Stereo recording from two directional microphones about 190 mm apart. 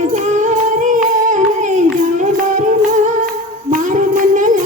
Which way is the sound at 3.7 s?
40° right (ahead or behind).